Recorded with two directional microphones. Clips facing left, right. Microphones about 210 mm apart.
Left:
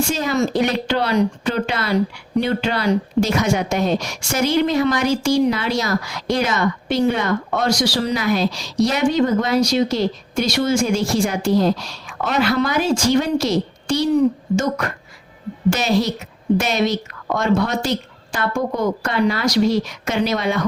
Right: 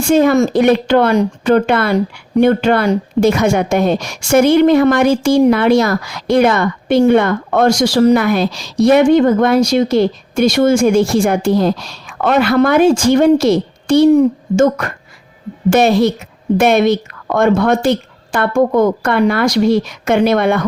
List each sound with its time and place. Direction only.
0.1 s speech: 55° right (ahead or behind)